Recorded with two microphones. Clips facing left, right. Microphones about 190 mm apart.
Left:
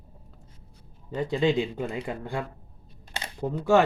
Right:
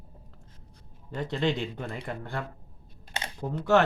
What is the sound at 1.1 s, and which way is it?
Speech, 10° left (ahead or behind).